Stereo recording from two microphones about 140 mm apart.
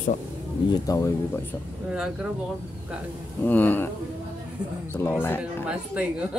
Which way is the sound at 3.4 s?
15° left (ahead or behind).